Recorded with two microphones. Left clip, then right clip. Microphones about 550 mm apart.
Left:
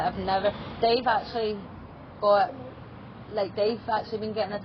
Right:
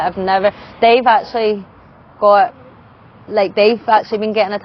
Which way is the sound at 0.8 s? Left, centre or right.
Right.